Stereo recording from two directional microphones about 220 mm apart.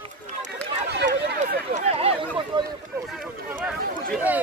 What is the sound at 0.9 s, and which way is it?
Run, 45° right (ahead or behind).